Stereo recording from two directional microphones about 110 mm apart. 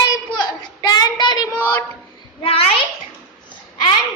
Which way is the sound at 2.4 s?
60° left (ahead or behind).